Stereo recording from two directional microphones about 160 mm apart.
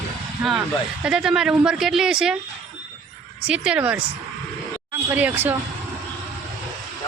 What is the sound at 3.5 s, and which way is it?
Speech, 5° right (ahead or behind).